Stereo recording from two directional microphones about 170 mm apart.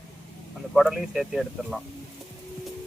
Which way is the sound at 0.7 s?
Centre (ahead or behind).